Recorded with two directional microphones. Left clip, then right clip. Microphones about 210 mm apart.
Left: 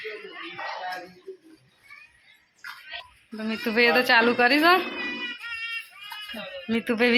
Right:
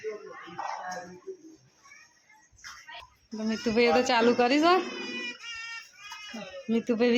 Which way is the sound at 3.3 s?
10° right (ahead or behind).